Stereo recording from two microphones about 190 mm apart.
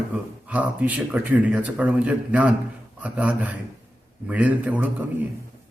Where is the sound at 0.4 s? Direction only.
10° right (ahead or behind).